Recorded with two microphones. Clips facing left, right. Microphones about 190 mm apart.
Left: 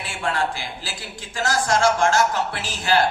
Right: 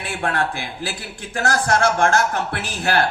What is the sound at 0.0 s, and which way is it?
Speech, 60° right (ahead or behind).